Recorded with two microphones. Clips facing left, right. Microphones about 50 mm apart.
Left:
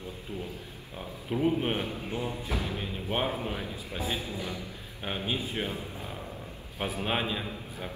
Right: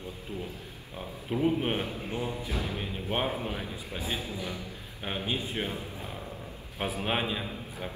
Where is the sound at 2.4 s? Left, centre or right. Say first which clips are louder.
Left 1 dB; left.